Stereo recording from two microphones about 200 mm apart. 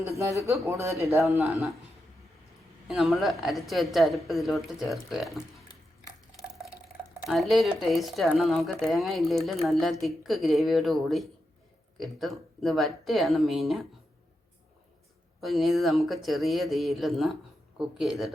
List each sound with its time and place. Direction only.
0.2 s speech: 15° right (ahead or behind)
1.4 s a woman's voice: centre (ahead or behind)
2.8 s a woman's voice: centre (ahead or behind)
6.9 s a woman's voice: centre (ahead or behind)
15.4 s a woman's voice: centre (ahead or behind)